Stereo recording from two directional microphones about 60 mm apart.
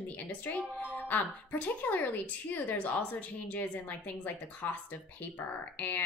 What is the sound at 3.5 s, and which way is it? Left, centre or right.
Speech, left.